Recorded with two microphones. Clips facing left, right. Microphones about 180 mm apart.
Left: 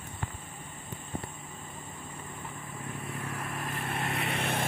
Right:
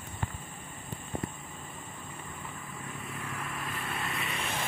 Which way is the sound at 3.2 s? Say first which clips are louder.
Left 1 dB; 40° left (ahead or behind).